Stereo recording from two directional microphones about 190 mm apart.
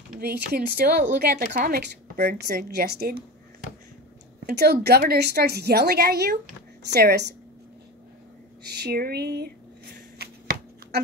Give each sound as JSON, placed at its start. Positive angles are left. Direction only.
{"t": 0.5, "sound": "a woman's voice", "side_deg": -55}
{"t": 4.5, "sound": "a woman's voice", "side_deg": -55}
{"t": 8.7, "sound": "a woman's voice", "side_deg": -55}